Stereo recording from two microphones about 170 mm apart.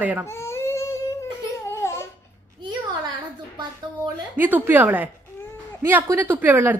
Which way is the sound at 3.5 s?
25° right (ahead or behind).